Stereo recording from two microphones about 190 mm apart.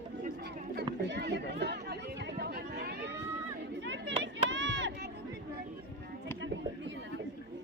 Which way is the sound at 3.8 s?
70° right (ahead or behind).